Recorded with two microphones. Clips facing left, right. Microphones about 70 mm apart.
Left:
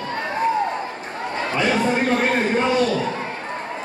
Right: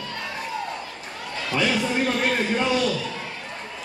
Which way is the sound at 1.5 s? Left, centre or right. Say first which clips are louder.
Left 3 dB; left.